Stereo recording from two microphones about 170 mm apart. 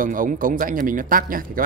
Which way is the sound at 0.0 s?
55° right (ahead or behind).